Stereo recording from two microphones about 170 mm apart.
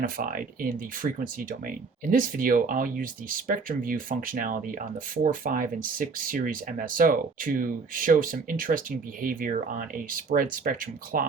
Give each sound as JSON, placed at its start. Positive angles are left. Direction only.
{"t": 0.0, "sound": "speech", "side_deg": -55}